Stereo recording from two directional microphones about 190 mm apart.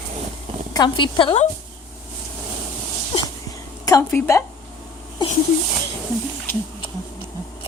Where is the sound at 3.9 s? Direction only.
15° left (ahead or behind).